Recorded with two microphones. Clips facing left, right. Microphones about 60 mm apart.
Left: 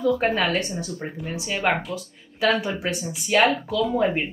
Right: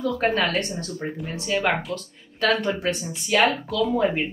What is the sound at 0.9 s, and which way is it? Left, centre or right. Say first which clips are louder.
Speech: right 1 dB; centre.